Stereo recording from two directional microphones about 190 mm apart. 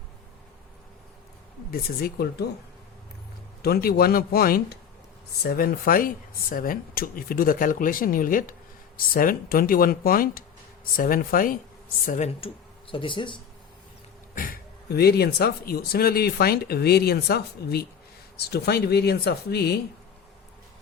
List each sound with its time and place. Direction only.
1.7 s speech: 55° left (ahead or behind)
3.6 s speech: 55° left (ahead or behind); by 12.5 s 40° left (ahead or behind)
12.9 s speech: 25° left (ahead or behind)
14.3 s speech: 50° left (ahead or behind)